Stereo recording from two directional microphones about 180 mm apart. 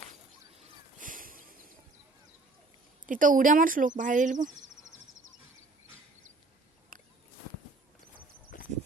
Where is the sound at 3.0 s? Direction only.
50° right (ahead or behind).